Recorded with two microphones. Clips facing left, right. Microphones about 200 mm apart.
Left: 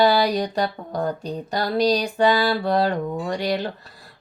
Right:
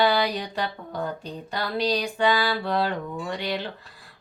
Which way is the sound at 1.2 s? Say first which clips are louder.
Left 6 dB; 40° left (ahead or behind).